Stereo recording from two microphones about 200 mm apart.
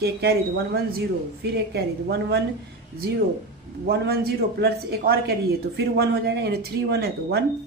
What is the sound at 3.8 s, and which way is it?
Speech, 50° right (ahead or behind).